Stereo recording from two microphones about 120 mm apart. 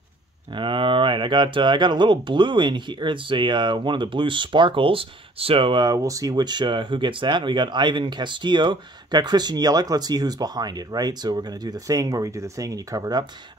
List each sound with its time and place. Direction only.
0.5 s speech: 45° right (ahead or behind)